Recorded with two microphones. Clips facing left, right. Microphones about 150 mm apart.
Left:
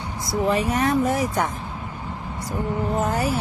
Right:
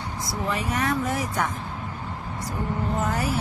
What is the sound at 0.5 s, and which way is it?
Speech, 30° left (ahead or behind).